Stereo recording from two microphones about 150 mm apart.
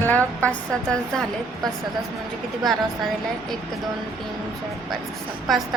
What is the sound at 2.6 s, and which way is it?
Speech, centre (ahead or behind).